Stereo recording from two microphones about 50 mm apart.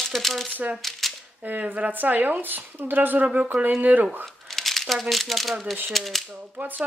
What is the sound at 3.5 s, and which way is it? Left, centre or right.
Speech, right.